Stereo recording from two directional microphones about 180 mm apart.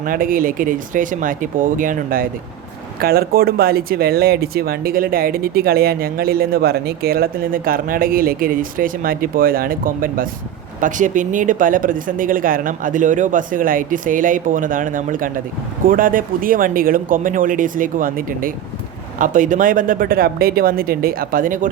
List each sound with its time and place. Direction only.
0.0 s speech: 50° right (ahead or behind)